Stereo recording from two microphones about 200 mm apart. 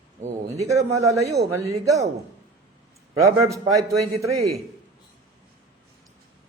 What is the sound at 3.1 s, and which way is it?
Speech, 15° right (ahead or behind).